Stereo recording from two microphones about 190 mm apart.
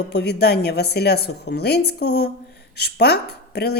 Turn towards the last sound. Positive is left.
turn(degrees=60)  # may be behind; listen again after turning